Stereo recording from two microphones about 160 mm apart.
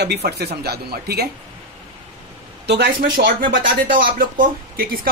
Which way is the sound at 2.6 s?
90° right.